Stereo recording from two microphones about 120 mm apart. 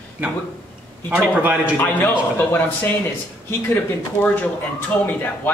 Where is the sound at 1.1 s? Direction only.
10° right (ahead or behind).